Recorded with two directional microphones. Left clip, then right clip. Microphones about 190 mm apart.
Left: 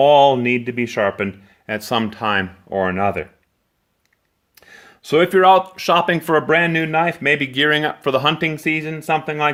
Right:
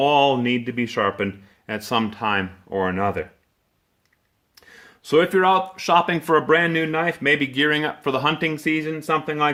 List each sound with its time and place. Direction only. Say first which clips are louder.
0.0 s speech: left 6 dB; 30° left (ahead or behind)
4.5 s speech: left 3 dB; 40° left (ahead or behind)